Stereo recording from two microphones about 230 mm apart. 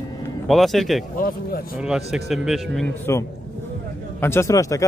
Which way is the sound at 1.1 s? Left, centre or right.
Left.